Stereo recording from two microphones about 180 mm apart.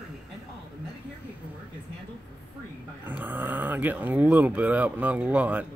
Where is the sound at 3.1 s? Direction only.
10° right (ahead or behind).